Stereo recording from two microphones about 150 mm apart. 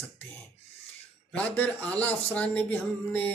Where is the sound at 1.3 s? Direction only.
10° left (ahead or behind).